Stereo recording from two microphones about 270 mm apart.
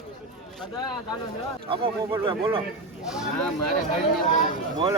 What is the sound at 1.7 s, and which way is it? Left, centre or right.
Speech, centre.